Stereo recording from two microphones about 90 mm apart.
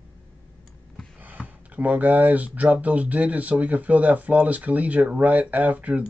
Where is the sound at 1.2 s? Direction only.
15° right (ahead or behind).